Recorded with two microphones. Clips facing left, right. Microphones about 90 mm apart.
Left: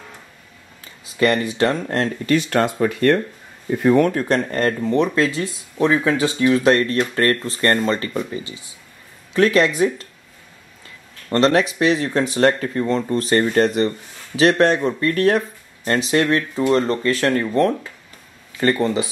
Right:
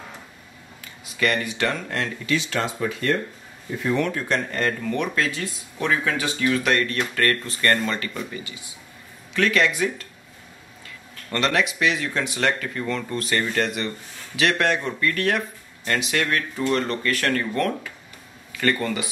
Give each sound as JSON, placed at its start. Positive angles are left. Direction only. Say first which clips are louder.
{"t": 1.2, "sound": "speech", "louder": "left 6 dB", "side_deg": 35}
{"t": 9.3, "sound": "speech", "louder": "left 5 dB", "side_deg": 35}
{"t": 11.2, "sound": "speech", "louder": "left 7 dB", "side_deg": 35}